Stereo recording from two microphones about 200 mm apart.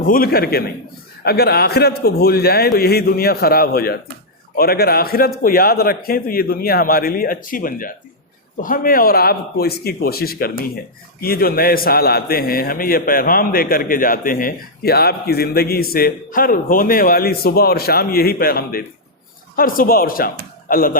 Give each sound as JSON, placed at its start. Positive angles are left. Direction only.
{"t": 0.0, "sound": "a man's voice", "side_deg": 45}